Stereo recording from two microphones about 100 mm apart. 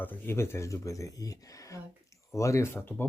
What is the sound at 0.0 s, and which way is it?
Speech, 20° left (ahead or behind).